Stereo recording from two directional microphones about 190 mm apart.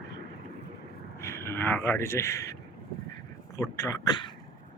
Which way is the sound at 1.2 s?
15° left (ahead or behind).